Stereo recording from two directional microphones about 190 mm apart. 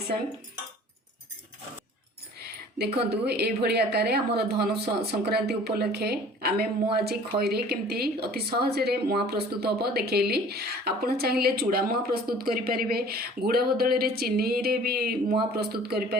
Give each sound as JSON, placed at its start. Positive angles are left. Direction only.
{"t": 2.7, "sound": "speech", "side_deg": -60}